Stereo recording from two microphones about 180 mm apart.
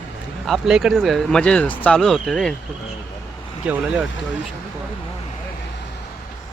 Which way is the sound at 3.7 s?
5° right (ahead or behind).